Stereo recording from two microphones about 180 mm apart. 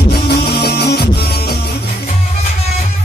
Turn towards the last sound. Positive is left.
turn(degrees=60)  # may be behind; listen again after turning